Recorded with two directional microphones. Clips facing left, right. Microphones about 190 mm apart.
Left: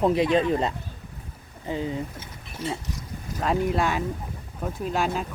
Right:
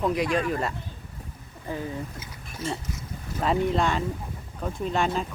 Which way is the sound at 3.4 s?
Centre (ahead or behind).